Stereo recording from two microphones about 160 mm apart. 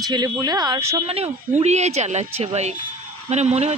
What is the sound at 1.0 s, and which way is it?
Speech, 40° right (ahead or behind).